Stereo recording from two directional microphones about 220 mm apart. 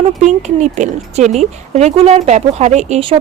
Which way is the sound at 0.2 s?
30° right (ahead or behind).